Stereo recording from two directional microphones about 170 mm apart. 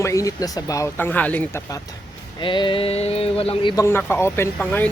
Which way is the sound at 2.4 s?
30° left (ahead or behind).